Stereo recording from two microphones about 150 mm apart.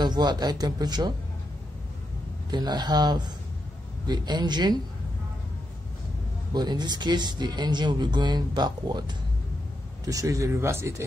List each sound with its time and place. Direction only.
0.0 s speech: 30° right (ahead or behind)
2.5 s speech: 30° right (ahead or behind)
6.5 s speech: 30° right (ahead or behind)